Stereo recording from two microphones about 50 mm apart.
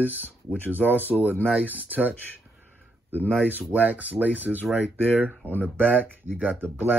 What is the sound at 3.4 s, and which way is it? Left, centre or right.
Speech, right.